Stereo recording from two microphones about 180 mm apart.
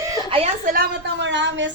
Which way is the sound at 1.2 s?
80° right.